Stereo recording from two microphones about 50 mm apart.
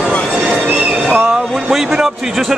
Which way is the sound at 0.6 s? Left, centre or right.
Right.